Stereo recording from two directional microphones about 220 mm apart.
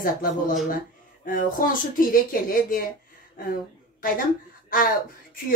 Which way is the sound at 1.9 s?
40° left (ahead or behind).